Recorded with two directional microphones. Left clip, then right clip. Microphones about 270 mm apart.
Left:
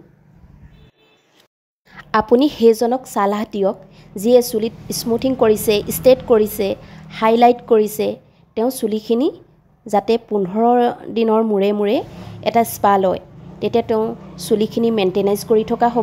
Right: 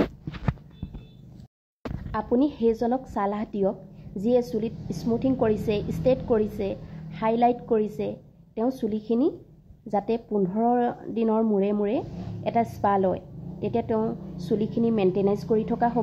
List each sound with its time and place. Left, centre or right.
2.0 s speech: left